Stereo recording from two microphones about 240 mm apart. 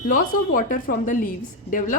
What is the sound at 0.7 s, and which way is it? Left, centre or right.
Speech, left.